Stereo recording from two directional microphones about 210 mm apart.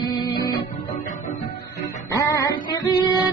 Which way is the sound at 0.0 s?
20° left (ahead or behind).